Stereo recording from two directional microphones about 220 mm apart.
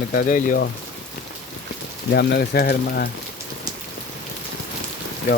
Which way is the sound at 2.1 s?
45° left (ahead or behind).